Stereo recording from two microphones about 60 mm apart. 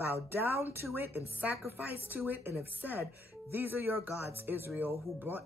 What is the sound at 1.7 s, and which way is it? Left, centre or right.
Speech, right.